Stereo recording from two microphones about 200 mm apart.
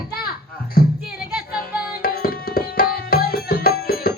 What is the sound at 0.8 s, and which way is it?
Music, 50° left (ahead or behind).